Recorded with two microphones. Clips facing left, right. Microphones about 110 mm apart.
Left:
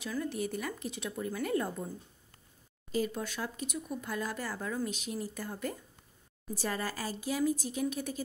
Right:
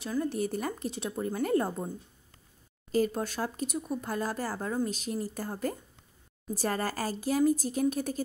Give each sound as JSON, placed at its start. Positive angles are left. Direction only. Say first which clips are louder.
{"t": 0.0, "sound": "speech", "louder": "right 4 dB", "side_deg": -35}
{"t": 2.9, "sound": "speech", "louder": "right 5 dB", "side_deg": -45}